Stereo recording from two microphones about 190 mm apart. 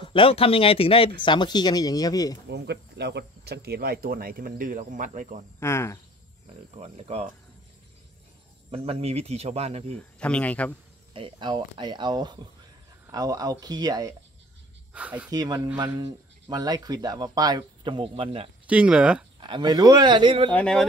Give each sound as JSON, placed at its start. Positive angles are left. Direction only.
{"t": 0.0, "sound": "speech", "side_deg": 25}
{"t": 2.5, "sound": "speech", "side_deg": -60}
{"t": 5.6, "sound": "speech", "side_deg": 15}
{"t": 6.7, "sound": "speech", "side_deg": -35}
{"t": 8.7, "sound": "speech", "side_deg": -30}
{"t": 9.9, "sound": "speech", "side_deg": 5}
{"t": 11.1, "sound": "speech", "side_deg": -25}
{"t": 14.9, "sound": "speech", "side_deg": -5}
{"t": 15.3, "sound": "speech", "side_deg": -20}
{"t": 18.7, "sound": "speech", "side_deg": -5}
{"t": 19.4, "sound": "speech", "side_deg": -25}
{"t": 20.5, "sound": "speech", "side_deg": 5}